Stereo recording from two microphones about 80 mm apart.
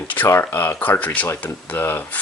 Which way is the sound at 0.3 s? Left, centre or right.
Left.